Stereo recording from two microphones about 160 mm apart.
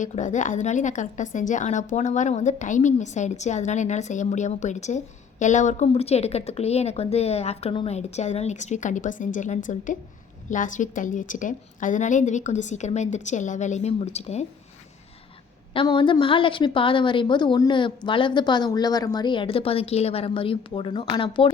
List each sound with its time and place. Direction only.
0.0 s a woman's voice: 50° left (ahead or behind)
15.7 s a woman's voice: 30° left (ahead or behind)